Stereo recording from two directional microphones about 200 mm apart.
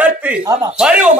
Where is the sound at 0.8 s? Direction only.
5° right (ahead or behind).